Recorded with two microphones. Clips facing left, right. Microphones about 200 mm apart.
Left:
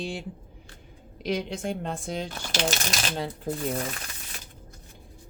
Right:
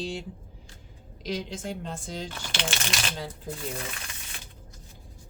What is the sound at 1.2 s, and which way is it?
Speech, 60° left (ahead or behind).